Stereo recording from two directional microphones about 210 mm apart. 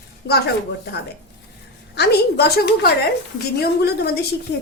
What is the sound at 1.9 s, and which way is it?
A woman's voice, 50° left (ahead or behind).